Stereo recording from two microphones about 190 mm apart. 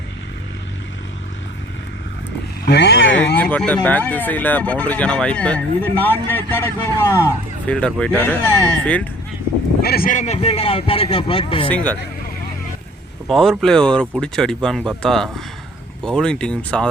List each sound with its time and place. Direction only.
2.6 s speech: 60° left (ahead or behind); by 3.3 s 85° left
3.3 s speech: 5° left (ahead or behind)
9.8 s a man's voice: 50° left (ahead or behind); by 11.7 s 30° left (ahead or behind)
11.7 s speech: 5° left (ahead or behind)
13.2 s speech: centre (ahead or behind)